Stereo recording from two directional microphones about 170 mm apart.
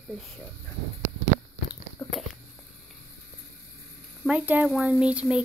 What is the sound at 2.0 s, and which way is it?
Biting, 20° left (ahead or behind).